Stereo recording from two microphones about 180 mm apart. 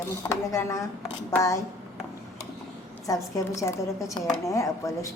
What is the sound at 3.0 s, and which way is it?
A woman's voice, 20° left (ahead or behind).